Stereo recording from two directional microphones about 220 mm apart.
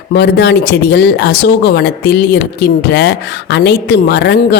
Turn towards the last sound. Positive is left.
turn(degrees=50)  # may be behind; listen again after turning